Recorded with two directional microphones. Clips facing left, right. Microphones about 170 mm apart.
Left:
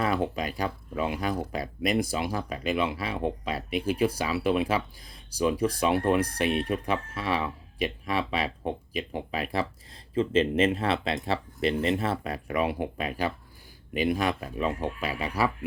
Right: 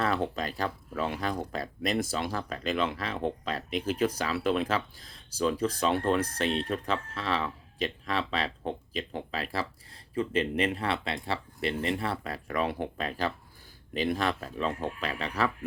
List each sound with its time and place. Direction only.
0.0 s speech: 10° left (ahead or behind)